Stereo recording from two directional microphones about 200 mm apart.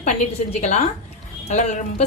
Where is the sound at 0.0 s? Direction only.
35° left (ahead or behind).